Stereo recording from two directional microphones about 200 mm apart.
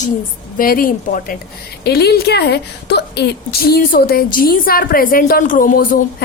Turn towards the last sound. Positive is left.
turn(degrees=45)  # may be behind; listen again after turning